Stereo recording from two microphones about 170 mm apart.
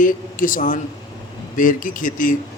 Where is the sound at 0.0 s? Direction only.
55° left (ahead or behind).